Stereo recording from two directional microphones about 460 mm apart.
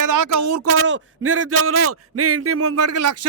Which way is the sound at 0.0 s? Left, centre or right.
Right.